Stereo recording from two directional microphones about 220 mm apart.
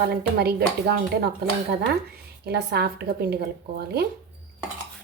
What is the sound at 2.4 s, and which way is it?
Speech, 45° right (ahead or behind).